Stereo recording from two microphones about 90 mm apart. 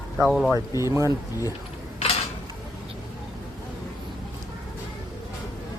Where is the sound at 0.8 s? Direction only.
30° right (ahead or behind).